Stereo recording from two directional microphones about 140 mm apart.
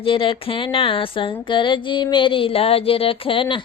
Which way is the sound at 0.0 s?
40° left (ahead or behind).